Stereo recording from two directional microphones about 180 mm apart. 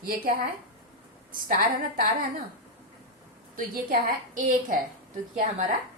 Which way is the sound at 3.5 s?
50° right (ahead or behind).